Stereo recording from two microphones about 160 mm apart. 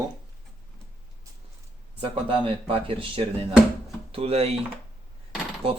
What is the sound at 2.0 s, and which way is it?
Speech, 35° right (ahead or behind).